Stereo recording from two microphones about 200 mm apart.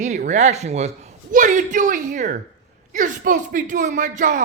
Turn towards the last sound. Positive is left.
turn(degrees=-40)  # may be behind; listen again after turning